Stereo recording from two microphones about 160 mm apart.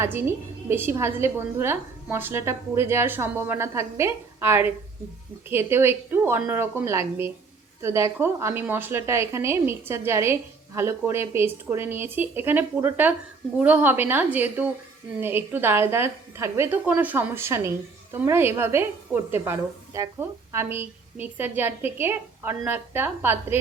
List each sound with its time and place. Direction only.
0.0 s a woman's voice: 15° right (ahead or behind)